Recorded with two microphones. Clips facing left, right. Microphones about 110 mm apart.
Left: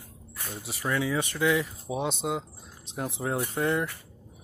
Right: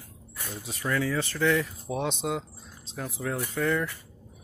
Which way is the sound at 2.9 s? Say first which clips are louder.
Left 2 dB; 25° left (ahead or behind).